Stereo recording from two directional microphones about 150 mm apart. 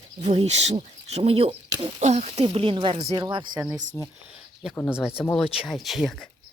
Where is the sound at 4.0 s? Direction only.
15° left (ahead or behind).